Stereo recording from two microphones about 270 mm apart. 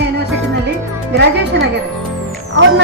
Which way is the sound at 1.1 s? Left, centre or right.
Right.